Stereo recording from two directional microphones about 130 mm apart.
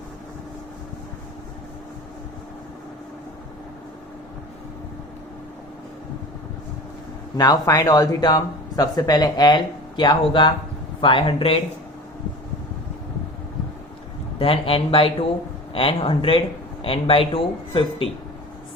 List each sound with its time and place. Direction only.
7.3 s speech: 30° left (ahead or behind)
14.3 s speech: 45° left (ahead or behind)